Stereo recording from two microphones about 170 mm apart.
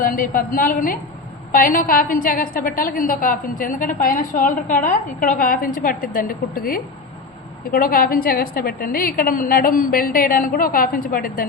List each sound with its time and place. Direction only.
0.0 s a woman's voice: 55° left (ahead or behind)